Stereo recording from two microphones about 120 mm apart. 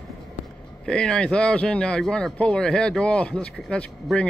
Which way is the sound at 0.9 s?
5° left (ahead or behind).